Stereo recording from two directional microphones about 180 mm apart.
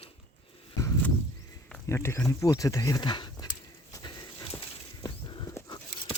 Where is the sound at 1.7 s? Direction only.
15° left (ahead or behind).